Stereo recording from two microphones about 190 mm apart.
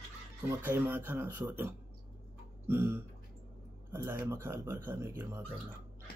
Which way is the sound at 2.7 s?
15° right (ahead or behind).